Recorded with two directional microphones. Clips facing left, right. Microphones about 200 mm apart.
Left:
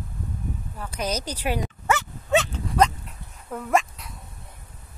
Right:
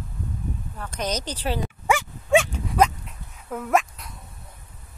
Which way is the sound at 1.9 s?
10° right (ahead or behind).